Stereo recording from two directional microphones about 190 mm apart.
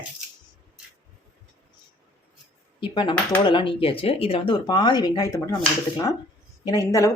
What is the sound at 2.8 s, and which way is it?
Speech, 25° left (ahead or behind).